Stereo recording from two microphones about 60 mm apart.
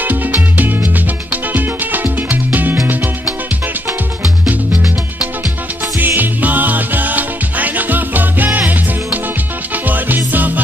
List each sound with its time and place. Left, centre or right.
0.0 s music: right
5.9 s music: right